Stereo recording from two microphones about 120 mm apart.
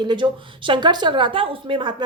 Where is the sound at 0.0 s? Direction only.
40° right (ahead or behind).